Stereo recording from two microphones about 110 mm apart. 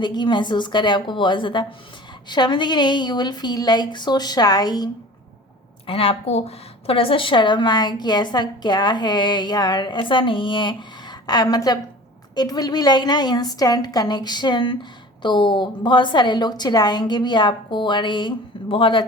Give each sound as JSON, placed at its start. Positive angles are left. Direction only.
{"t": 0.0, "sound": "a woman's voice", "side_deg": 45}
{"t": 5.8, "sound": "a woman's voice", "side_deg": 55}